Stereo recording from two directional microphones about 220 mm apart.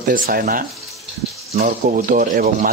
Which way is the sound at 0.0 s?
40° right (ahead or behind).